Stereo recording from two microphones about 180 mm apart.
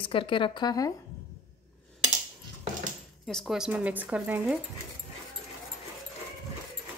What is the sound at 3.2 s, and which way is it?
Speech, centre (ahead or behind).